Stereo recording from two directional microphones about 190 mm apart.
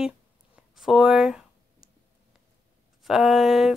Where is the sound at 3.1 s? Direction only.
Centre (ahead or behind).